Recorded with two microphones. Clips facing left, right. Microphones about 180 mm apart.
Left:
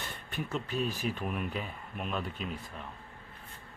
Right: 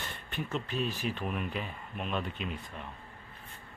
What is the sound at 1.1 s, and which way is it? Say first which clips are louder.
Speech: even; centre (ahead or behind).